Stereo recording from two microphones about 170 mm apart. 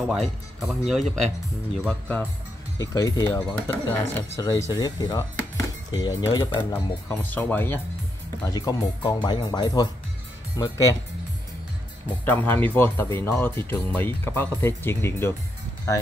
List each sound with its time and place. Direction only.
0.6 s speech: centre (ahead or behind)
2.8 s speech: 20° left (ahead or behind)
8.5 s speech: 20° left (ahead or behind)
12.1 s speech: 10° left (ahead or behind)